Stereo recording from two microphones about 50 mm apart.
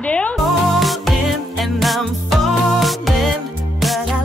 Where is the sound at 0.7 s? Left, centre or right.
Centre.